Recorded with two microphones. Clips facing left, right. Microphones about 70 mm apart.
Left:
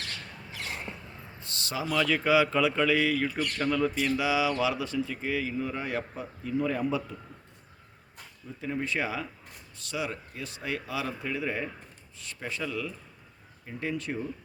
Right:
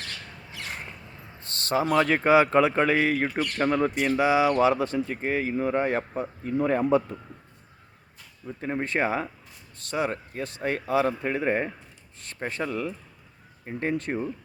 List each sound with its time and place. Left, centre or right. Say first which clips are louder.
1.4 s speech: right 9 dB; right
8.6 s speech: right 4 dB; right